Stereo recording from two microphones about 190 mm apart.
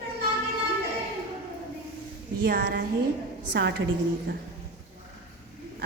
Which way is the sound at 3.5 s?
65° right (ahead or behind).